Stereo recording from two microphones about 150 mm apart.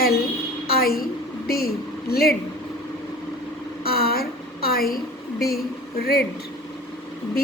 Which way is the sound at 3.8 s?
90° left.